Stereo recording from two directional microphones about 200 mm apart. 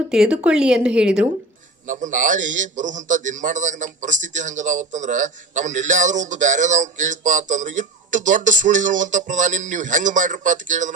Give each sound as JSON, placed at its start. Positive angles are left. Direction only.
{"t": 0.1, "sound": "speech", "side_deg": -5}
{"t": 1.9, "sound": "a man's voice", "side_deg": -40}